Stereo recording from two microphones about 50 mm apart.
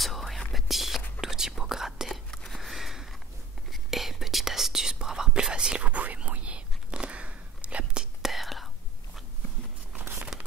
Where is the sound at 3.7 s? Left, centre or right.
Centre; by 8.0 s right.